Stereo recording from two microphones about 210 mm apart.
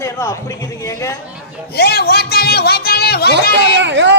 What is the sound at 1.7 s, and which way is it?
A woman's voice, 50° left (ahead or behind).